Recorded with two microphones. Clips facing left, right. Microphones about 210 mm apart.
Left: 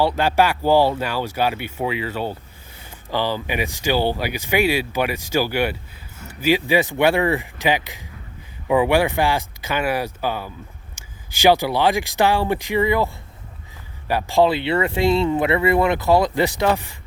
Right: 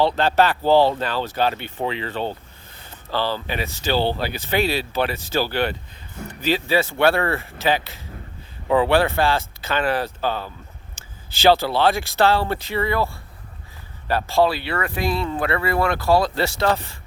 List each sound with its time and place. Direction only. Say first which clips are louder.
0.0 s speech: even; 10° left (ahead or behind)
14.1 s speech: left 2 dB; 15° left (ahead or behind)